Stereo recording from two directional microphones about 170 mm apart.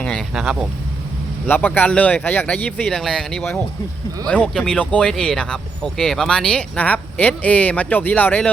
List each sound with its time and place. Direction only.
0.0 s speech: 5° left (ahead or behind)
1.5 s speech: 10° left (ahead or behind)